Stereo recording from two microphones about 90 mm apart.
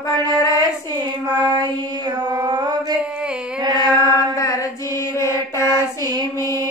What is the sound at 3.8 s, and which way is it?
Chant, 45° right (ahead or behind).